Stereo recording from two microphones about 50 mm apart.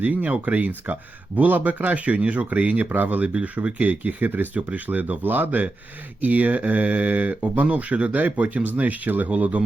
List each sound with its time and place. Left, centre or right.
0.0 s speech: right
3.3 s speech: right